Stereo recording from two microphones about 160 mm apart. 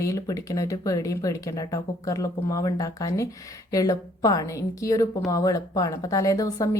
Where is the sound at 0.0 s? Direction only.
20° left (ahead or behind).